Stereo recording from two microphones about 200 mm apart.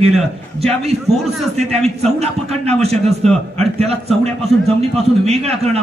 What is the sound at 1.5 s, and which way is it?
A man's voice, 30° right (ahead or behind).